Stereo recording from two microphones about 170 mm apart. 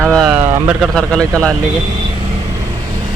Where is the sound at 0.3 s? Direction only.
15° right (ahead or behind).